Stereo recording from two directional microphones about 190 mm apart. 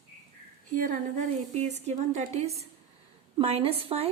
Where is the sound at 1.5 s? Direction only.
35° right (ahead or behind).